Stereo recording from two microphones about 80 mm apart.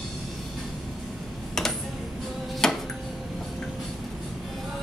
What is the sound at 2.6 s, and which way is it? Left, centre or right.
Tick-tock, centre.